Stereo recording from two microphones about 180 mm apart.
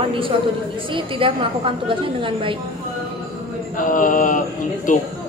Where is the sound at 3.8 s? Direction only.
50° left (ahead or behind).